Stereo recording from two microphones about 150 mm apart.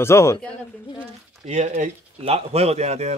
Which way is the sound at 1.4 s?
50° right (ahead or behind).